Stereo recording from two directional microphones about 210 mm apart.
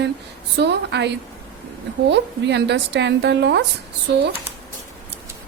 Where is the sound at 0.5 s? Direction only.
55° right (ahead or behind).